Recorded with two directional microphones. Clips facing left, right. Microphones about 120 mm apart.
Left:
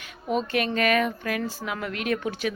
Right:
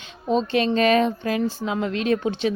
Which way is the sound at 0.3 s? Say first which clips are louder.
Right 5 dB; 25° right (ahead or behind).